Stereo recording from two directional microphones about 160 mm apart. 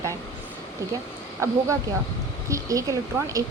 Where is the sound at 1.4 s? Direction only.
20° right (ahead or behind).